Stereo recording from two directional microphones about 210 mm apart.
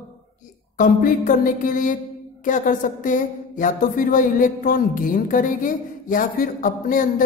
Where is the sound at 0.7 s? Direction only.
40° left (ahead or behind).